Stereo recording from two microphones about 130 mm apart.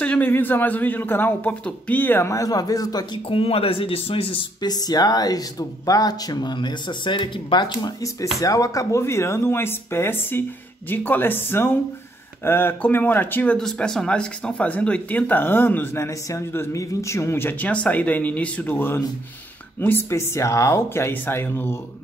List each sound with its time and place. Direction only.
0.0 s speech: 10° left (ahead or behind); by 3.2 s 30° left (ahead or behind)
3.3 s speech: 45° left (ahead or behind)
8.4 s speech: 25° left (ahead or behind)
20.1 s speech: 20° left (ahead or behind)